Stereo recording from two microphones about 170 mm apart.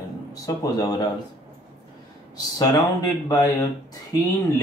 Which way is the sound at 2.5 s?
20° left (ahead or behind).